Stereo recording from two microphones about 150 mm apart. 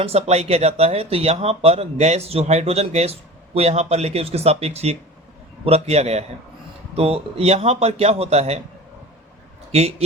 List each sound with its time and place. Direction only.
0.0 s speech: 45° right (ahead or behind)